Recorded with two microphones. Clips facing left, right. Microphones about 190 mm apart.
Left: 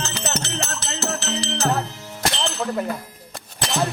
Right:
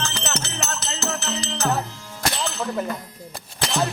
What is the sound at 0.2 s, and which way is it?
Music, 35° left (ahead or behind).